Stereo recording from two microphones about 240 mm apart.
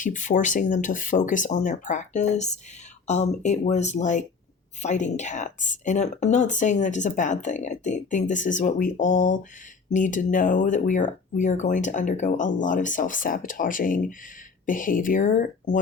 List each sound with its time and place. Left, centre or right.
0.0 s speech: left